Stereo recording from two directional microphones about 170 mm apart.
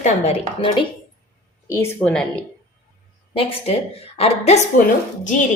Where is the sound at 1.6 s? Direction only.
15° left (ahead or behind).